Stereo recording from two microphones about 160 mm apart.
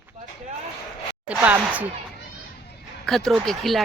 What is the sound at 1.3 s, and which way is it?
Speech, 10° right (ahead or behind).